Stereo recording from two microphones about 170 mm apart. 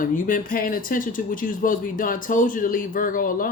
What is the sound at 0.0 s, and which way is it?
Speech, 55° left (ahead or behind).